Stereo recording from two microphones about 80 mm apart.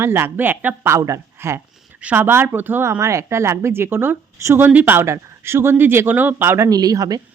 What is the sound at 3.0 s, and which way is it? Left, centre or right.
Speech, right.